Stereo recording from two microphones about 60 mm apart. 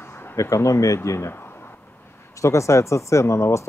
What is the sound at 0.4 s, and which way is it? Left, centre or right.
Speech, left.